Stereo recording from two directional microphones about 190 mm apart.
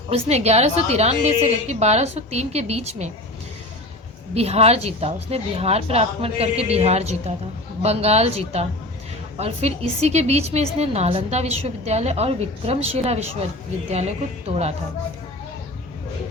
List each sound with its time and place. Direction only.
0.1 s a woman's voice: 35° right (ahead or behind)
4.4 s a woman's voice: 35° right (ahead or behind)